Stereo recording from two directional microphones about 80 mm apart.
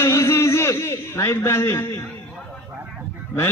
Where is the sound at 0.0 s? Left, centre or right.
Left.